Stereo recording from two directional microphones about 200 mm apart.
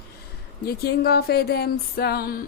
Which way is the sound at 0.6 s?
50° left (ahead or behind).